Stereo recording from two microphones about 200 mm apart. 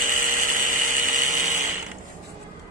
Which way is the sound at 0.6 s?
40° right (ahead or behind).